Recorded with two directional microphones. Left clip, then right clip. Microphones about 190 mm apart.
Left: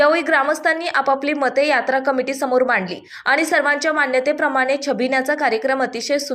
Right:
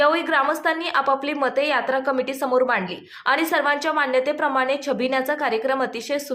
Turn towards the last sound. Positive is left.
turn(degrees=15)  # may be behind; listen again after turning